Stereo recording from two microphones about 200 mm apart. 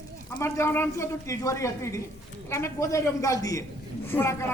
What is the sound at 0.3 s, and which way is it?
A man's voice, 15° left (ahead or behind).